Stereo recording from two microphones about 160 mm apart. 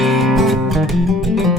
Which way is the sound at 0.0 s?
Centre (ahead or behind).